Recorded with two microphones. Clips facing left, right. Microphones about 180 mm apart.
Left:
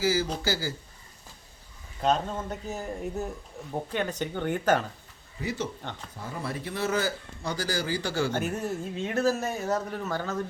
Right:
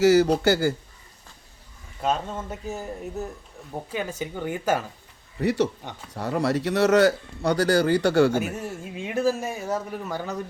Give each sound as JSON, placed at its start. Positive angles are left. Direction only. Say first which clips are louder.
{"t": 0.0, "sound": "speech", "louder": "right 10 dB", "side_deg": -70}
{"t": 2.0, "sound": "speech", "louder": "even", "side_deg": -5}
{"t": 5.4, "sound": "speech", "louder": "right 10 dB", "side_deg": -65}
{"t": 5.8, "sound": "speech", "louder": "even", "side_deg": -15}
{"t": 6.1, "sound": "speech", "louder": "right 12 dB", "side_deg": -75}
{"t": 8.3, "sound": "speech", "louder": "right 2 dB", "side_deg": -5}